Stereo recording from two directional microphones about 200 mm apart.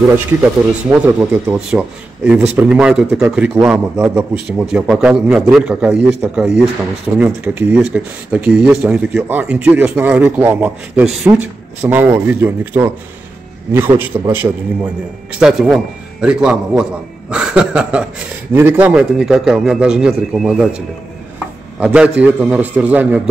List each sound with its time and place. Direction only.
0.9 s a man's voice: 10° right (ahead or behind)